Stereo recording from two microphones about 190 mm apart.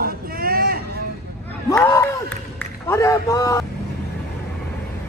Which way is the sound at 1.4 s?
15° left (ahead or behind).